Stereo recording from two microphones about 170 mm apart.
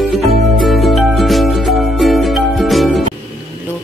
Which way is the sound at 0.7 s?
Centre (ahead or behind).